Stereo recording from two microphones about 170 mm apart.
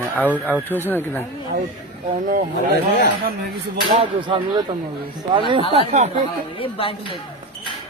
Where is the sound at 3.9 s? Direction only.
30° right (ahead or behind).